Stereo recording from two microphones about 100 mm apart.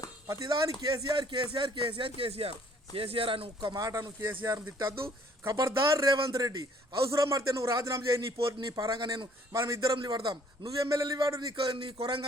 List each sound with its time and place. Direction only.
0.3 s a man's voice: 35° right (ahead or behind); by 3.8 s 60° right (ahead or behind)
3.8 s a man's voice: 40° right (ahead or behind)
4.2 s a man's voice: 20° right (ahead or behind)
6.1 s speech: 60° right (ahead or behind)
6.3 s a man's voice: 40° right (ahead or behind)
9.0 s a man's voice: 45° right (ahead or behind)
9.5 s a man's voice: 30° right (ahead or behind)
10.0 s a man's voice: 50° right (ahead or behind)
11.5 s speech: 60° right (ahead or behind)